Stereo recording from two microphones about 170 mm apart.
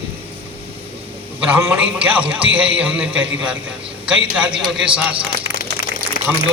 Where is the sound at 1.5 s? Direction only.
10° right (ahead or behind).